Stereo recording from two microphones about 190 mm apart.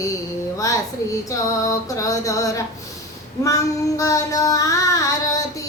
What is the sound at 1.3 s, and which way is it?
Speech, 15° left (ahead or behind).